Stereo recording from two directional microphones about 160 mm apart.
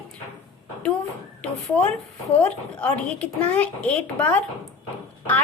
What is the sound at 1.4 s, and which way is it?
Speech, 10° left (ahead or behind).